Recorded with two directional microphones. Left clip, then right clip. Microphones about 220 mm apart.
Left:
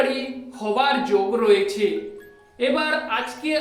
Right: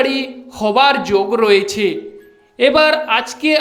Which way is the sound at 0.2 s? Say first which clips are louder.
Right 9 dB; 45° right (ahead or behind).